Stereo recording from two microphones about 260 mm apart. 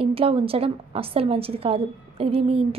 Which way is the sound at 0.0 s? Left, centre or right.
Right.